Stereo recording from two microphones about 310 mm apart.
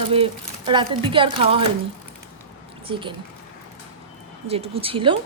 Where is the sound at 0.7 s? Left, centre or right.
Centre.